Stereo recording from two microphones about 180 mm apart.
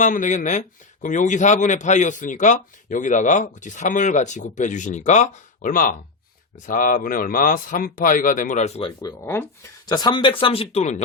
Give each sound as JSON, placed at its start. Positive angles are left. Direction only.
{"t": 0.0, "sound": "a man's voice", "side_deg": 45}
{"t": 9.0, "sound": "speech", "side_deg": 15}